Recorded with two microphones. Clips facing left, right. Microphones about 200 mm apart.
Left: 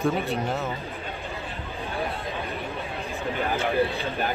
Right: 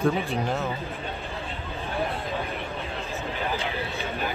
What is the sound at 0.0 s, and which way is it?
Speech, centre (ahead or behind).